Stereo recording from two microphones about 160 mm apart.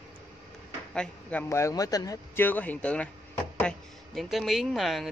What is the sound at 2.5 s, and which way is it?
A man's voice, 10° left (ahead or behind).